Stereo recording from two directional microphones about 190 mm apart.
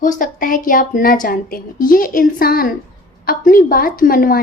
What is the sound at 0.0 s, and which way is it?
A woman's voice, 45° left (ahead or behind).